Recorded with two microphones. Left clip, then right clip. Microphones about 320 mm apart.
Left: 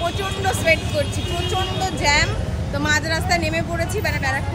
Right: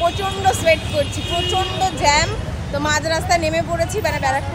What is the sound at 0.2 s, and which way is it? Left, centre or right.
Speech, centre.